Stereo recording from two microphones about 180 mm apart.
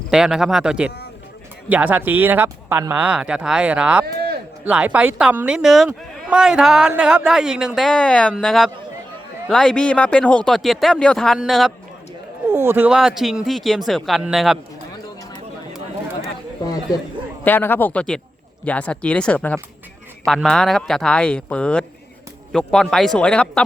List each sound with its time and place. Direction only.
0.1 s speech: 5° right (ahead or behind)
4.0 s a sound: 60° right (ahead or behind)
4.6 s speech: 10° right (ahead or behind)
12.5 s speech: 15° right (ahead or behind)
16.6 s speech: 20° left (ahead or behind)
17.4 s speech: 10° left (ahead or behind)